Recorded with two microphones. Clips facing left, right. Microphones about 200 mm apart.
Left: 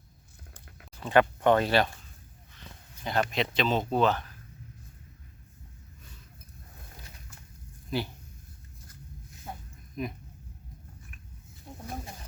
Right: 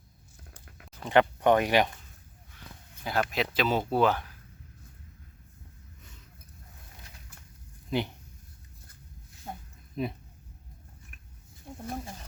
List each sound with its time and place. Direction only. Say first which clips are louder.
1.0 s speech: even; 15° right (ahead or behind)
2.6 s speech: even; 5° right (ahead or behind)
7.9 s speech: right 2 dB; 20° right (ahead or behind)
9.9 s speech: right 2 dB; 30° right (ahead or behind)